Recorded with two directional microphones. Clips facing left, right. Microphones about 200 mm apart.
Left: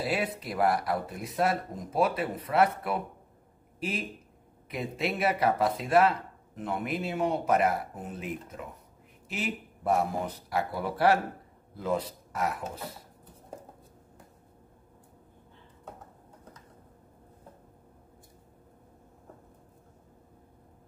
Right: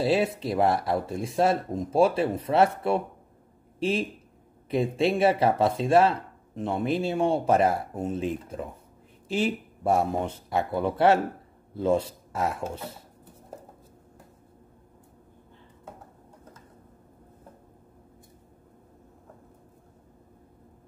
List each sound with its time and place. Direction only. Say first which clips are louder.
0.0 s speech: right 7 dB; 25° right (ahead or behind)
4.6 s speech: right 8 dB; 30° right (ahead or behind)